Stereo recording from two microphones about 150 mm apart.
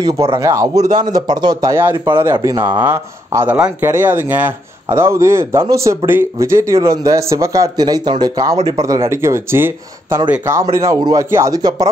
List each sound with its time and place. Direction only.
0.4 s speech: 20° right (ahead or behind)